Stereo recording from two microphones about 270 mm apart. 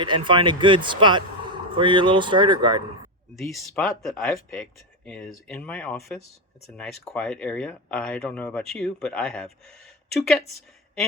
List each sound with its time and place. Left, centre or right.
0.0 s speech: centre
3.3 s speech: centre